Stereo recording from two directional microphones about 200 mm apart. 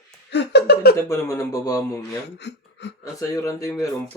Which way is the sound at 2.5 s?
60° left (ahead or behind).